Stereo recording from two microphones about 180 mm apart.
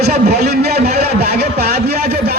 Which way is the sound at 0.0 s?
60° right (ahead or behind).